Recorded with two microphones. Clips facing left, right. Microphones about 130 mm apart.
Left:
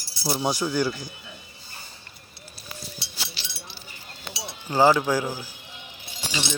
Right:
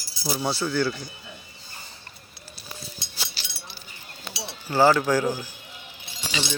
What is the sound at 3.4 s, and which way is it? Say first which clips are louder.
Chink: left 1 dB; 40° right (ahead or behind).